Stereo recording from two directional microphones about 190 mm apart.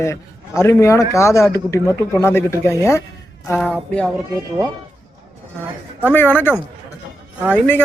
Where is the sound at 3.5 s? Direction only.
5° right (ahead or behind).